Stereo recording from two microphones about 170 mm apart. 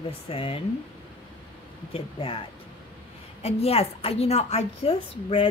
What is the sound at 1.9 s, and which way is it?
Speech, 35° left (ahead or behind).